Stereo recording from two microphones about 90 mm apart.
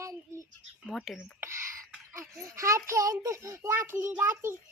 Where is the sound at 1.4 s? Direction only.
30° right (ahead or behind).